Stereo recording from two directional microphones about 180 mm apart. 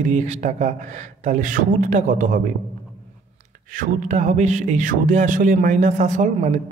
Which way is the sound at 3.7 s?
45° right (ahead or behind).